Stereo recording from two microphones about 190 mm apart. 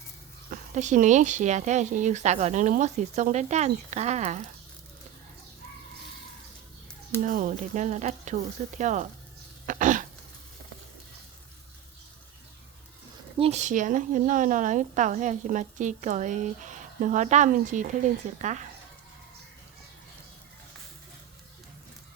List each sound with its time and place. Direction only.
0.5 s a woman's voice: 40° right (ahead or behind)
7.2 s a woman's voice: 45° right (ahead or behind)
9.6 s throat clearing: 45° right (ahead or behind)
13.4 s a woman's voice: 35° right (ahead or behind)